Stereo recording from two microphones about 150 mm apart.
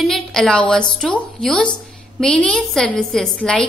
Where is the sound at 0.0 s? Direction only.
5° left (ahead or behind).